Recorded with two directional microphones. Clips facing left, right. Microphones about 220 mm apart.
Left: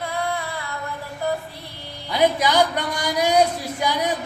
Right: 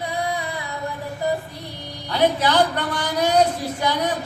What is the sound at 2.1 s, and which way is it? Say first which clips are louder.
A man's voice: even; 10° left (ahead or behind).